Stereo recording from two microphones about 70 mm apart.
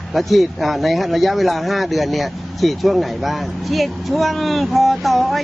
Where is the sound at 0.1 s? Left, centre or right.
Centre.